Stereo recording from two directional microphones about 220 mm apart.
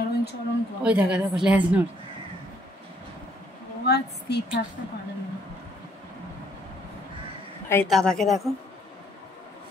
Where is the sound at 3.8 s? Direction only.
50° left (ahead or behind).